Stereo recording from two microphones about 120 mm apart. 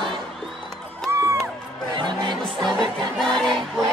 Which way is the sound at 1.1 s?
20° right (ahead or behind).